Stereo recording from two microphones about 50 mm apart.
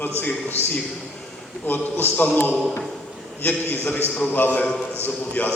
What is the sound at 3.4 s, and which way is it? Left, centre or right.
A man's voice, left.